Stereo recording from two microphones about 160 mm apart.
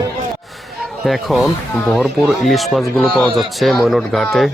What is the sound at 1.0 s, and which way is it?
Speech, centre (ahead or behind).